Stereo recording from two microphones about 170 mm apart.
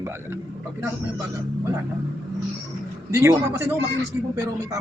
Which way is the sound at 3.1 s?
15° right (ahead or behind).